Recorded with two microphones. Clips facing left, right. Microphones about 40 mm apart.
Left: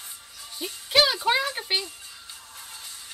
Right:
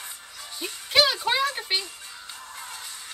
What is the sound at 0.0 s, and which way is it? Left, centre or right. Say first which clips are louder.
Music: right 3 dB; right.